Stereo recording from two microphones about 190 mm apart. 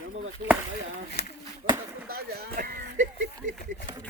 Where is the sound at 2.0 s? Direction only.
55° right (ahead or behind).